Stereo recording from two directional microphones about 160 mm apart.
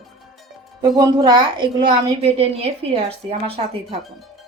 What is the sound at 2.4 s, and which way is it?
Speech, 40° right (ahead or behind).